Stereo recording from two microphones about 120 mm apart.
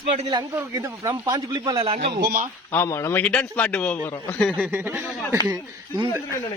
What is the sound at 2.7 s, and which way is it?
Speech, 20° left (ahead or behind).